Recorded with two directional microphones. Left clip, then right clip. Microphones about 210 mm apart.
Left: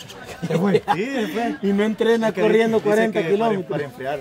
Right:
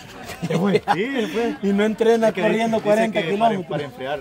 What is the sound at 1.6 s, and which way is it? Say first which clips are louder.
Speech: even; 15° right (ahead or behind).